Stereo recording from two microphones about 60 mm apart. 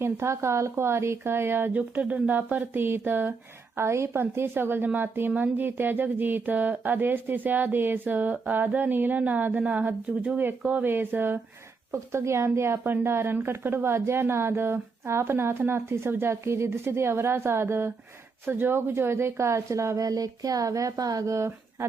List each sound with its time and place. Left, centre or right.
0.0 s a woman's voice: right
1.7 s speech: right
3.8 s speech: right
11.9 s a woman's voice: right
20.1 s speech: right
21.3 s speech: right